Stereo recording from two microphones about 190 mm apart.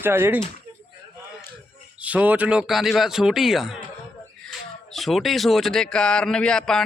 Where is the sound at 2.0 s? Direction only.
5° right (ahead or behind).